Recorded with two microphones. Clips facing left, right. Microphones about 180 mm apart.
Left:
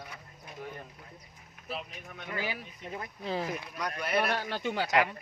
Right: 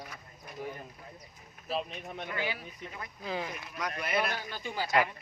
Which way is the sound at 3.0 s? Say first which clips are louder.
Left 2 dB; 35° left (ahead or behind).